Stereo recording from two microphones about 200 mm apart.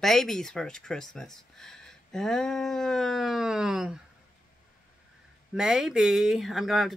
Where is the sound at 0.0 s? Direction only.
Centre (ahead or behind).